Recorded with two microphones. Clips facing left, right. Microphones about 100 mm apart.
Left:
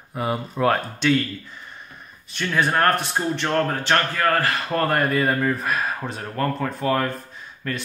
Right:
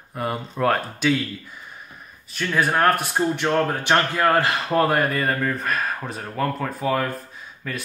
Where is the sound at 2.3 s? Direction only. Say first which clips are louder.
Even; centre (ahead or behind).